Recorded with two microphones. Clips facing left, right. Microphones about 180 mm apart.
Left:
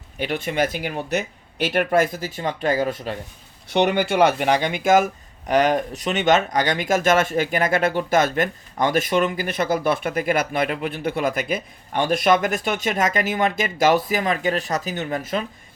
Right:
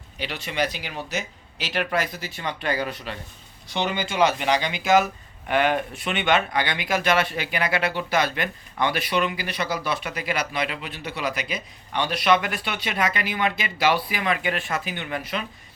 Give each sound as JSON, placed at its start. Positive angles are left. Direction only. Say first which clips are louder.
{"t": 0.2, "sound": "speech", "louder": "left 5 dB", "side_deg": 50}
{"t": 3.7, "sound": "speech", "louder": "left 8 dB", "side_deg": 65}